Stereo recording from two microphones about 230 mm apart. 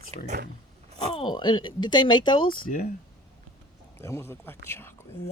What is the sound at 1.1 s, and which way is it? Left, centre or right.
Speech, centre.